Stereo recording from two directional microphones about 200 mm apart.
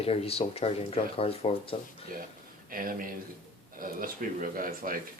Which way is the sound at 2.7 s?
45° right (ahead or behind).